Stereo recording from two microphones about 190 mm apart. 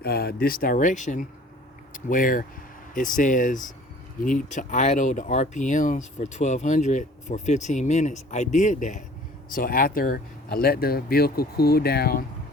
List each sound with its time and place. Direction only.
0.0 s speech: 55° left (ahead or behind)